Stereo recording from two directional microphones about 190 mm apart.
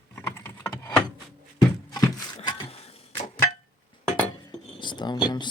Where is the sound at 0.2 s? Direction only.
10° left (ahead or behind).